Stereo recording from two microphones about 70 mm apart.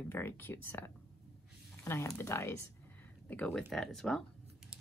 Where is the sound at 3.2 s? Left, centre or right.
Left.